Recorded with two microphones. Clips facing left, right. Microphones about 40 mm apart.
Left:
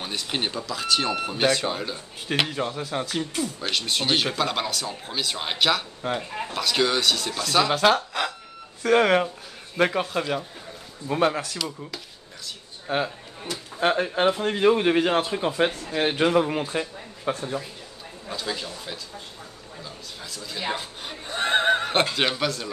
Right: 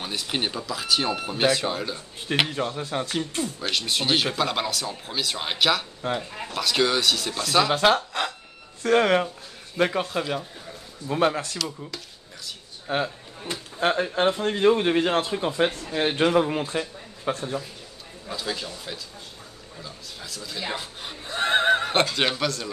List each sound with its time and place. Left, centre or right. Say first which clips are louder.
0.0 s speech: even; centre
12.4 s a sound: even; centre
13.7 s speech: left 1 dB; centre
19.8 s chuckle: even; centre
22.1 s speech: even; centre